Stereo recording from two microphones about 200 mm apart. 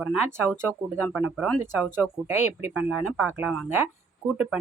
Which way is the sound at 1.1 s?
5° right (ahead or behind).